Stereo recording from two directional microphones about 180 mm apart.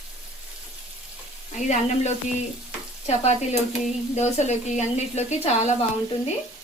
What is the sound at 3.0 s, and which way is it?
Speech, 40° left (ahead or behind).